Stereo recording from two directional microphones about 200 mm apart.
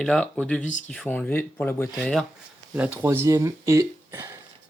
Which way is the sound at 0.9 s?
5° left (ahead or behind).